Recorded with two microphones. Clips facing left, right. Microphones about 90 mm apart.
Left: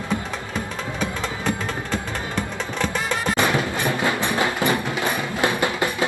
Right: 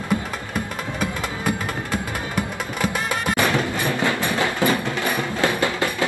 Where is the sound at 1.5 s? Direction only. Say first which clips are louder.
Right 1 dB; 10° right (ahead or behind).